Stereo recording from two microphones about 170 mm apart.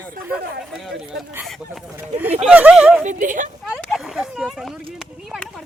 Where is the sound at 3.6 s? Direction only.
Centre (ahead or behind).